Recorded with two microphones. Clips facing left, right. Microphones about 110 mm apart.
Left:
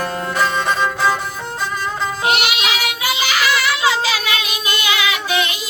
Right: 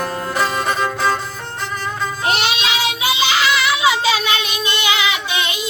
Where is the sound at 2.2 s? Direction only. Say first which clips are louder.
Even; 30° right (ahead or behind).